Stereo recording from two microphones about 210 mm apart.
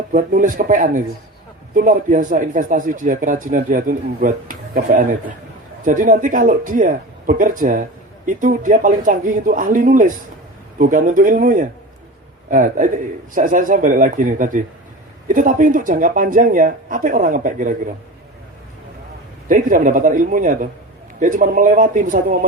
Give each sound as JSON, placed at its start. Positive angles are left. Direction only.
{"t": 0.1, "sound": "a man's voice", "side_deg": -40}
{"t": 19.5, "sound": "a man's voice", "side_deg": -40}